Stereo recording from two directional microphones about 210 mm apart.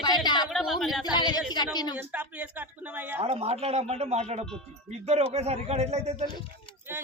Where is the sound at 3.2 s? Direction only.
30° right (ahead or behind).